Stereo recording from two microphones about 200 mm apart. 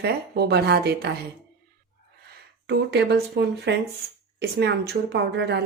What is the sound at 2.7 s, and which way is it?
Speech, 55° right (ahead or behind).